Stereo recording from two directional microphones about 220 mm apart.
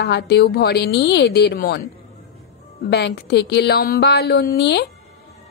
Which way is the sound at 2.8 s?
50° left (ahead or behind).